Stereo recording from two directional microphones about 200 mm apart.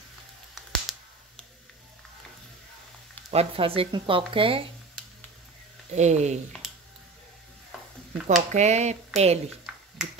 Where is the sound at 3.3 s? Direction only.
30° right (ahead or behind).